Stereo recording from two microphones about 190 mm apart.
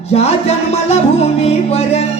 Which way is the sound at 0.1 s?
35° left (ahead or behind).